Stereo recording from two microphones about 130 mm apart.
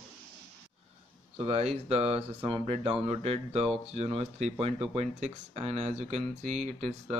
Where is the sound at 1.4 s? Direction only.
50° right (ahead or behind).